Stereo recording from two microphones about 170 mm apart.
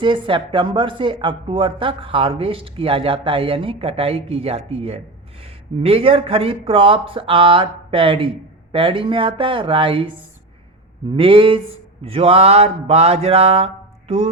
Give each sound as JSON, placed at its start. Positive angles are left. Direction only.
{"t": 0.0, "sound": "speech", "side_deg": -30}
{"t": 11.1, "sound": "speech", "side_deg": -30}